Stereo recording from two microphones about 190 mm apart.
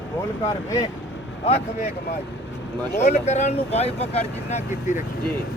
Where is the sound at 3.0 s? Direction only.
35° left (ahead or behind).